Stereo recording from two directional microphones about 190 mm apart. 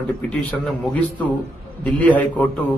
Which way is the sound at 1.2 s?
5° left (ahead or behind).